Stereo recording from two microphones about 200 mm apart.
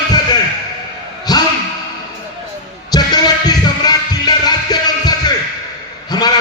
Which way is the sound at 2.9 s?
20° left (ahead or behind).